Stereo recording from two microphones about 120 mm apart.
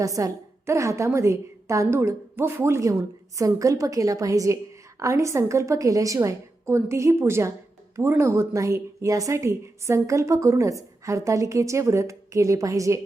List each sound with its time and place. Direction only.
0.0 s a woman's voice: 30° right (ahead or behind)